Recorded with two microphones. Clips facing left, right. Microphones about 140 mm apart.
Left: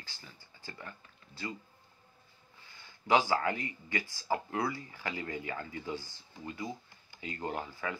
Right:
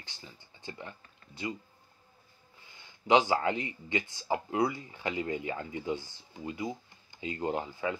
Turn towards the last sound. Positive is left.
turn(degrees=-20)  # may be behind; listen again after turning